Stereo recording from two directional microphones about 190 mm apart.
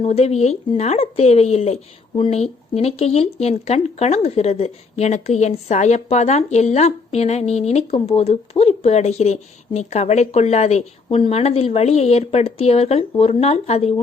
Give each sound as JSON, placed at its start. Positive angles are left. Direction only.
{"t": 0.0, "sound": "speech", "side_deg": 35}